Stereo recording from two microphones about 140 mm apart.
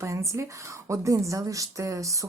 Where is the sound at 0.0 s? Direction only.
20° right (ahead or behind).